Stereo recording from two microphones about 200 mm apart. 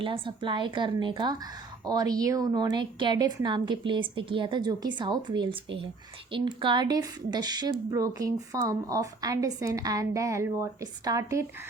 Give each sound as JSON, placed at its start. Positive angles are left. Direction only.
{"t": 0.0, "sound": "a woman's voice", "side_deg": -25}